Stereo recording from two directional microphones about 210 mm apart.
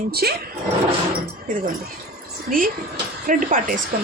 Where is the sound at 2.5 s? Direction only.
40° right (ahead or behind).